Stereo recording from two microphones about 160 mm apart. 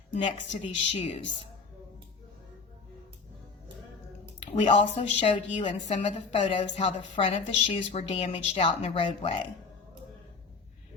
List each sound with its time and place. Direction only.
0.1 s a woman's voice: 50° left (ahead or behind)
0.6 s a woman's voice: 35° left (ahead or behind)
4.6 s a woman's voice: 40° left (ahead or behind)